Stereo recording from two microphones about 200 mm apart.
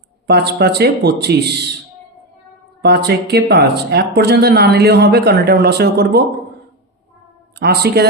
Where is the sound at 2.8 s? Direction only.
55° right (ahead or behind).